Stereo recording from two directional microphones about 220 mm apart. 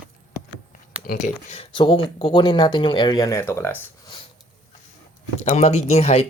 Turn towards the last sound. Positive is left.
turn(degrees=30)  # may be behind; listen again after turning